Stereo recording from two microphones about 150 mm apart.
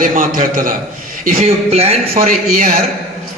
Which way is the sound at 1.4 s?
40° right (ahead or behind).